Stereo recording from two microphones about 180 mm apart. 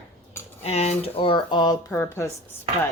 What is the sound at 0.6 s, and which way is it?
Speech, 35° left (ahead or behind).